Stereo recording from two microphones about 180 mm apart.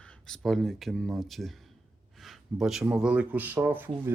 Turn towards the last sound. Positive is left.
turn(degrees=-10)  # may be behind; listen again after turning